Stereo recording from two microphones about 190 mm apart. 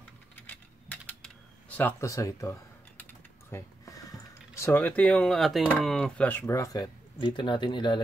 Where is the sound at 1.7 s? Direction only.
15° left (ahead or behind).